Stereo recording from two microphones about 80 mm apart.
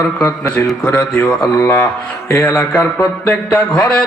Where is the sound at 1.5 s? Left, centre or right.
Left.